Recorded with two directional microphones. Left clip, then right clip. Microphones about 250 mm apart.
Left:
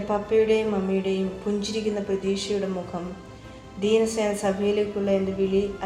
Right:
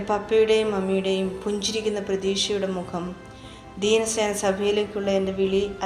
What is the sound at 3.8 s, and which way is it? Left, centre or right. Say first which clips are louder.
A woman's voice: right 1 dB; right.